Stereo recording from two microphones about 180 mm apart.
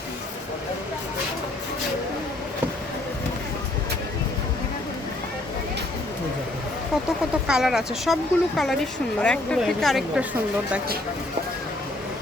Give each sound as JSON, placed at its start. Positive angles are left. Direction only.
{"t": 7.4, "sound": "speech", "side_deg": -5}